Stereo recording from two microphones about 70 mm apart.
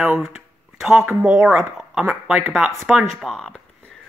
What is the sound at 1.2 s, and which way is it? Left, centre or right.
Speech, centre.